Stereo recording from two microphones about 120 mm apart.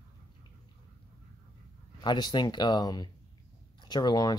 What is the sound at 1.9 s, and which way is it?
Speech, 35° left (ahead or behind).